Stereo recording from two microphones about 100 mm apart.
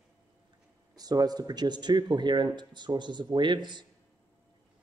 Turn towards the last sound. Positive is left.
turn(degrees=-50)  # may be behind; listen again after turning